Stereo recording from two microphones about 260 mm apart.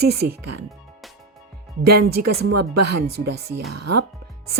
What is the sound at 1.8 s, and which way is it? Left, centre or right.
A woman's voice, right.